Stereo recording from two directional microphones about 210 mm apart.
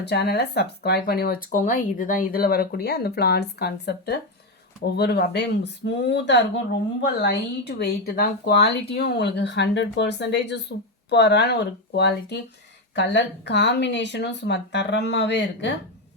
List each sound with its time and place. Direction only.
0.0 s speech: 50° left (ahead or behind)